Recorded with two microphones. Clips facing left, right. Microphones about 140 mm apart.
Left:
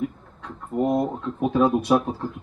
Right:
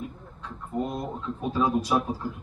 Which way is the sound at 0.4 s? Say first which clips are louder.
Left 6 dB; 55° left (ahead or behind).